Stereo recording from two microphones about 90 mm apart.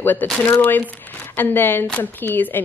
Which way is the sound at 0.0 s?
20° left (ahead or behind).